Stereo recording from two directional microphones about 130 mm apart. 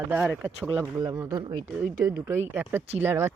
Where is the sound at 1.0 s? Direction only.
25° right (ahead or behind).